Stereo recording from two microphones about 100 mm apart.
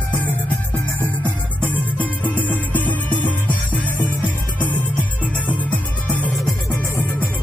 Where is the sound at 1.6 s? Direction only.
15° left (ahead or behind).